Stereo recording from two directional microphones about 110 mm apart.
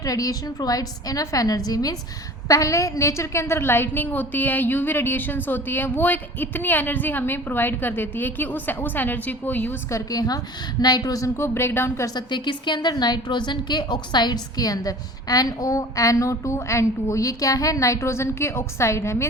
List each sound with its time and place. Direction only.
0.0 s a woman's voice: 30° left (ahead or behind); by 9.7 s 15° left (ahead or behind)
9.9 s a woman's voice: 35° left (ahead or behind)
12.1 s a woman's voice: 45° left (ahead or behind); by 19.3 s 25° left (ahead or behind)